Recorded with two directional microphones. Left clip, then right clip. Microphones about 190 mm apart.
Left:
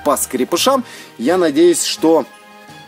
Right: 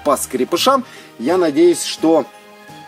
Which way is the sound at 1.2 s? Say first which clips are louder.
Left 1 dB; 30° left (ahead or behind).